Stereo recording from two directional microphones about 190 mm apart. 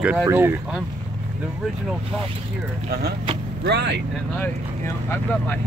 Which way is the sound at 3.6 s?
60° right (ahead or behind).